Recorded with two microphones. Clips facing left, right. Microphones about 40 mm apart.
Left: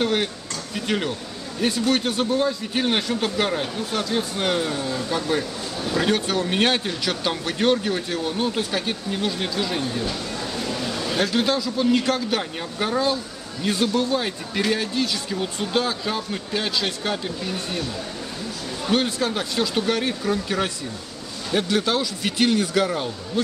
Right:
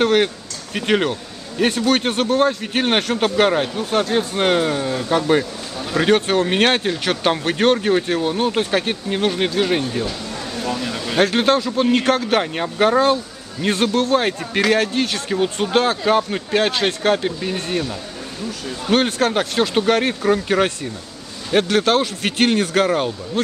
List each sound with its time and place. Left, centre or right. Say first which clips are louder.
0.0 s speech: right 6 dB; right
3.3 s speech: right 7 dB; right
5.4 s speech: right 1 dB; centre
5.9 s speech: right 6 dB; right
11.1 s speech: right 7 dB; right
15.3 s speech: right 7 dB; right
15.7 s speech: right 8 dB; right
18.9 s speech: right 5 dB; right
21.5 s speech: right 6 dB; right